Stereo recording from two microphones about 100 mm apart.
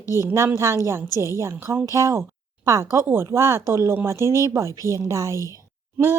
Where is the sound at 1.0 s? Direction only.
35° left (ahead or behind).